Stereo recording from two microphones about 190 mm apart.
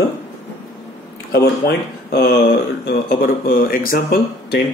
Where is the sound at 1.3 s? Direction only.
55° left (ahead or behind).